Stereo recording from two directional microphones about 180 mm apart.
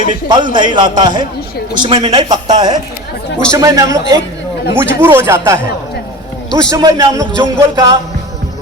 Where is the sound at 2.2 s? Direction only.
40° right (ahead or behind).